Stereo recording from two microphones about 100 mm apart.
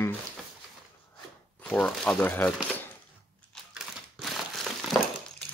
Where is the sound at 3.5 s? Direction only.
Centre (ahead or behind).